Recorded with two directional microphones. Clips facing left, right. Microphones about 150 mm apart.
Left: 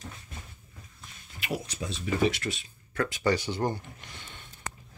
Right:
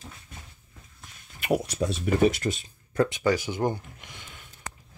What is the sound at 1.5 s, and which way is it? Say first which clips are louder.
Speech: right 9 dB; 65° right (ahead or behind).